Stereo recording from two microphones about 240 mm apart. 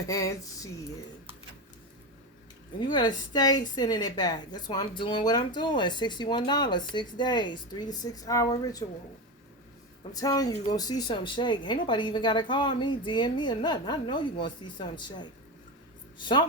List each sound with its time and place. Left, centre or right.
0.1 s a woman's voice: centre
2.8 s a woman's voice: centre
10.2 s a woman's voice: centre